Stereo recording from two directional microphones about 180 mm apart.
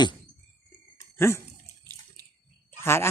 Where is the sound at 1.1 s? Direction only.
15° left (ahead or behind).